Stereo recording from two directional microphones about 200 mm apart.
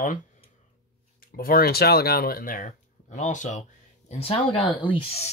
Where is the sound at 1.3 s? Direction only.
50° left (ahead or behind).